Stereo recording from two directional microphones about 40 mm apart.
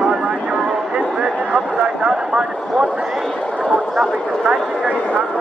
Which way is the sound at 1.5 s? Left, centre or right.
Right.